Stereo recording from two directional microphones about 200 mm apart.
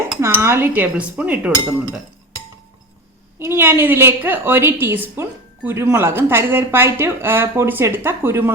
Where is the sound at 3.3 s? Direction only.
10° right (ahead or behind).